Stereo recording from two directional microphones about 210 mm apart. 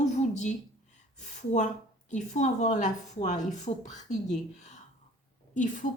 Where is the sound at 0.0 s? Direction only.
35° left (ahead or behind).